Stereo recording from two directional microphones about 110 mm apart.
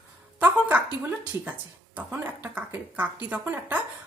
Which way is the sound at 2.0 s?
15° right (ahead or behind).